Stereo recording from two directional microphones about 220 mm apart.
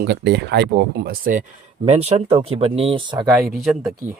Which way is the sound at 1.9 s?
30° right (ahead or behind).